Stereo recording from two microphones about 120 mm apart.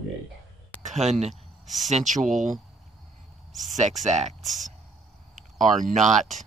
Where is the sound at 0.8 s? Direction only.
70° right (ahead or behind).